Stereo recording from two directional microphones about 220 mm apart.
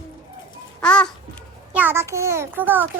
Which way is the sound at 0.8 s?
5° left (ahead or behind).